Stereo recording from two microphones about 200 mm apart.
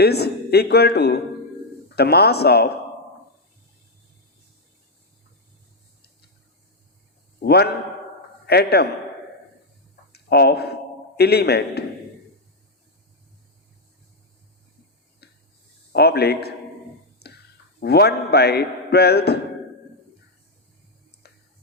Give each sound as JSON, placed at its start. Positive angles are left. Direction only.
{"t": 0.0, "sound": "speech", "side_deg": 55}
{"t": 7.4, "sound": "speech", "side_deg": 55}
{"t": 10.1, "sound": "speech", "side_deg": 55}
{"t": 15.9, "sound": "a man's voice", "side_deg": 55}
{"t": 21.2, "sound": "whispering", "side_deg": 55}